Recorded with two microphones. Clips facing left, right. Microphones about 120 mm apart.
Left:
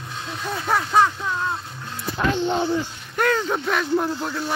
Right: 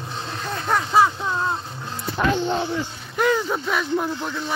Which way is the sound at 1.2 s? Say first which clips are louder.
Right 2 dB; 30° right (ahead or behind).